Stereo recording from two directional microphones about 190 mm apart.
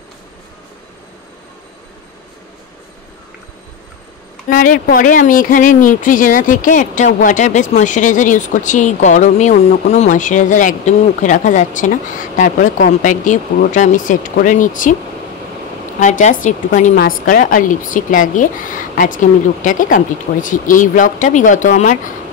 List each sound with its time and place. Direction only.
4.5 s speech: 45° left (ahead or behind)
16.0 s a woman's voice: 40° left (ahead or behind)